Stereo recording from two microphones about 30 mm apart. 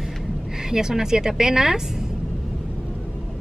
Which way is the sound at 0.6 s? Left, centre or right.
Centre.